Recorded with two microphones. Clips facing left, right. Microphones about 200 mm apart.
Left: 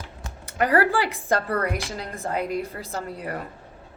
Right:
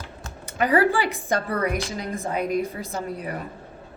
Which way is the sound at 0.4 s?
20° right (ahead or behind).